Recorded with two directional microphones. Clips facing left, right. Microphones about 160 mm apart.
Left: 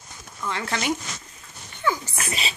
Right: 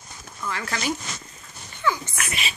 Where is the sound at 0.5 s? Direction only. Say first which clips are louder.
Left 2 dB; 25° left (ahead or behind).